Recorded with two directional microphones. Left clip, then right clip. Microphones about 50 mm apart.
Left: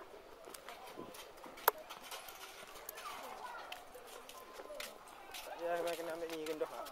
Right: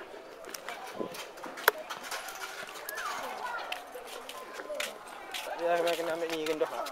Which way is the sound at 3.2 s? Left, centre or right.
Centre.